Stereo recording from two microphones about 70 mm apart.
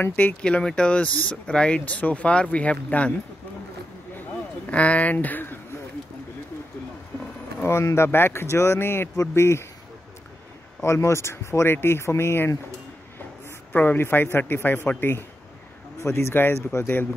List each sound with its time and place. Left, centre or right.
0.0 s speech: left
4.2 s a sound: centre
7.9 s speech: left
10.8 s speech: left
13.7 s speech: left
16.0 s speech: left